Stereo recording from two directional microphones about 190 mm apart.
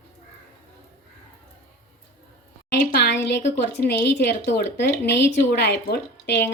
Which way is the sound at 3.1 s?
65° left (ahead or behind).